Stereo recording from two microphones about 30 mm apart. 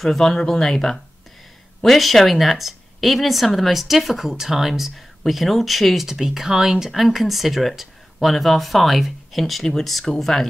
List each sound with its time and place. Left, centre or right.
0.0 s speech: centre
1.8 s speech: centre
6.0 s speech: centre
6.9 s speech: centre